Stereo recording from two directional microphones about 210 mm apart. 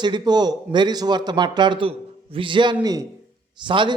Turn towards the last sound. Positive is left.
turn(degrees=-20)  # may be behind; listen again after turning